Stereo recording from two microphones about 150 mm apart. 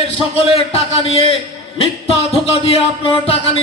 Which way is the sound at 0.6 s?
40° left (ahead or behind).